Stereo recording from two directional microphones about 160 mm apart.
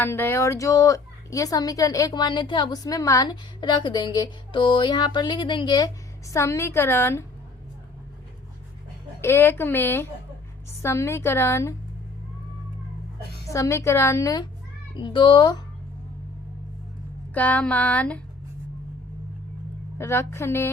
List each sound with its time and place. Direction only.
0.0 s speech: 15° left (ahead or behind)
9.2 s speech: 15° left (ahead or behind)
13.5 s speech: 20° left (ahead or behind)
14.9 s speech: 30° left (ahead or behind)
17.3 s speech: 10° left (ahead or behind)
20.0 s speech: 15° left (ahead or behind)